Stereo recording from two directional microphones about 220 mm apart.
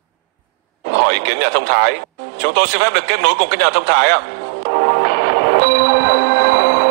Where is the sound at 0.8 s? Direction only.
50° right (ahead or behind).